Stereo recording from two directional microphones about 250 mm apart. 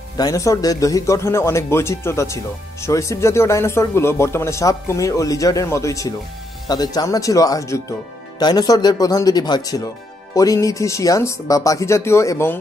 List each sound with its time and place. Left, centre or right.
0.2 s speech: centre